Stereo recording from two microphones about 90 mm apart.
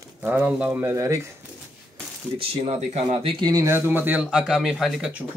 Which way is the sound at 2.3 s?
90° right.